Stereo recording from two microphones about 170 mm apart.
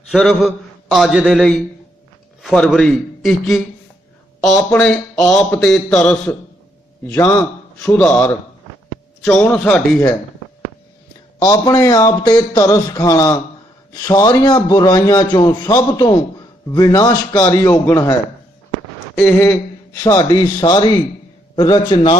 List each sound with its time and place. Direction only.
0.1 s a man's voice: centre (ahead or behind)
11.3 s a man's voice: 25° left (ahead or behind)
19.1 s a man's voice: 15° left (ahead or behind)